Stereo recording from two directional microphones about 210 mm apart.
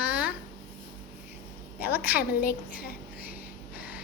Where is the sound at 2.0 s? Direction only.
45° left (ahead or behind).